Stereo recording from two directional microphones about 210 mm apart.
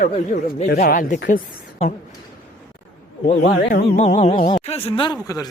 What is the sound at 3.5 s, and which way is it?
Speech, 40° left (ahead or behind).